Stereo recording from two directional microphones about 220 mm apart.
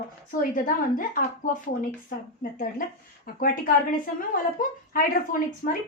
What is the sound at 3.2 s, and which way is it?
Speech, 40° left (ahead or behind).